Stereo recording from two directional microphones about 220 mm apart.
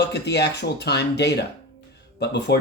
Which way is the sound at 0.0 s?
50° left (ahead or behind).